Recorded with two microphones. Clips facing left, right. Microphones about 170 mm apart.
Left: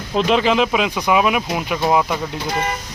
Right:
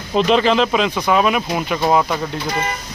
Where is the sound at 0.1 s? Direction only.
5° left (ahead or behind).